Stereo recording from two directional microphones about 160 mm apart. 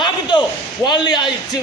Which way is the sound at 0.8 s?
30° left (ahead or behind).